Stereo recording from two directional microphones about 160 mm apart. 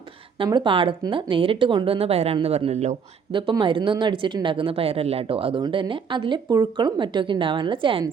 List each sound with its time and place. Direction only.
0.3 s speech: 30° right (ahead or behind)
3.3 s speech: 30° right (ahead or behind)